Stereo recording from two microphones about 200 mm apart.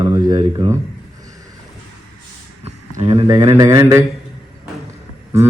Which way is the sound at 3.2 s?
20° right (ahead or behind).